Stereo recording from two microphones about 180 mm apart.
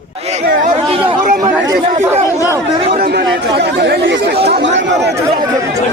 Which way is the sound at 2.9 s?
55° right (ahead or behind).